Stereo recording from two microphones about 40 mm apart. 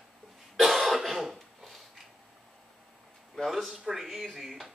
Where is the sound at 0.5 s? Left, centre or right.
Centre.